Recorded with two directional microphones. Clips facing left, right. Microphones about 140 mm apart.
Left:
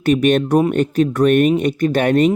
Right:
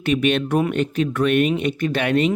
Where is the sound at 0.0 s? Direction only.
45° left (ahead or behind).